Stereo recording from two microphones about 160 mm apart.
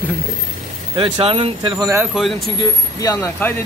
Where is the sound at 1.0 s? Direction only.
35° right (ahead or behind).